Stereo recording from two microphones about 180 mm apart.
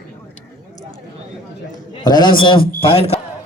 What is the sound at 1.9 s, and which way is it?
A man's voice, 25° left (ahead or behind).